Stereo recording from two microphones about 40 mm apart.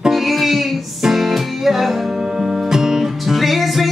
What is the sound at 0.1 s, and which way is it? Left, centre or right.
Music, centre.